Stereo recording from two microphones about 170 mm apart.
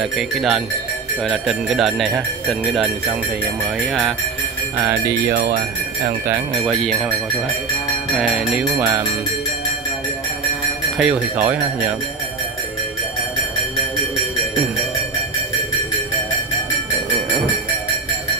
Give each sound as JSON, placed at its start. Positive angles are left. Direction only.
{"t": 0.0, "sound": "speech", "side_deg": -5}
{"t": 4.7, "sound": "speech", "side_deg": -10}
{"t": 5.3, "sound": "speech", "side_deg": -75}
{"t": 6.6, "sound": "speech", "side_deg": 0}
{"t": 8.2, "sound": "speech", "side_deg": -5}
{"t": 11.0, "sound": "speech", "side_deg": -5}